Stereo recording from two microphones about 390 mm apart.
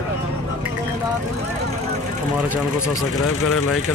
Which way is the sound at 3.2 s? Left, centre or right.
Left.